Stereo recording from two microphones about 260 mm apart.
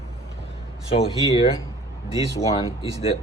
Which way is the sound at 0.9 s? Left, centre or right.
Left.